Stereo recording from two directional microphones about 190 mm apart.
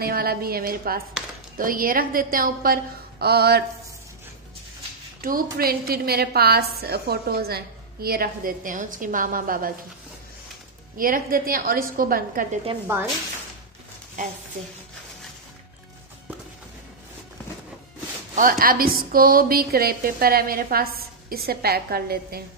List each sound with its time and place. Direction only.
0.0 s a woman's voice: 55° right (ahead or behind)
5.2 s a woman's voice: 50° right (ahead or behind)
11.0 s a woman's voice: 50° right (ahead or behind)
12.8 s speech: 15° right (ahead or behind)
18.3 s a woman's voice: 45° right (ahead or behind)